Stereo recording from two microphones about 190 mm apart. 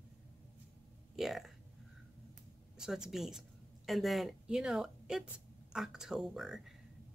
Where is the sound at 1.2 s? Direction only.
Centre (ahead or behind).